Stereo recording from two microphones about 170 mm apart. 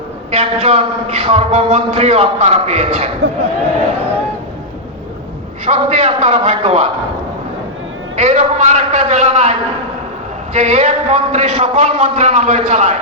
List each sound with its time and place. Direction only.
0.3 s a man's voice: 40° right (ahead or behind)
5.6 s a man's voice: 40° right (ahead or behind)
8.1 s a man's voice: 40° right (ahead or behind)